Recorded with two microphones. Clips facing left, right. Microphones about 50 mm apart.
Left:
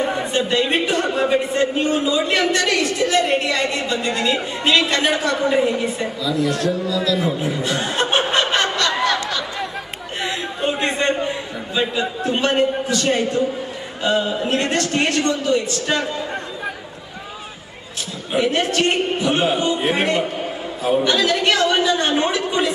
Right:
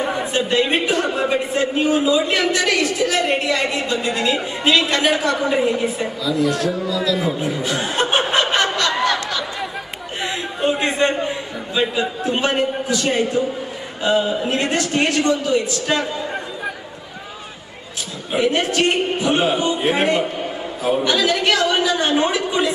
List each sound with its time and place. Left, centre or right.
0.0 s a man's voice: centre
6.9 s chuckle: centre
10.2 s a sound: centre
14.0 s a man's voice: centre
18.3 s a man's voice: centre